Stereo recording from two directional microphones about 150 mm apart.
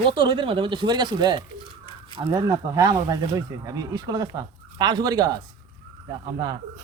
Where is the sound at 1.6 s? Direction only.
30° left (ahead or behind).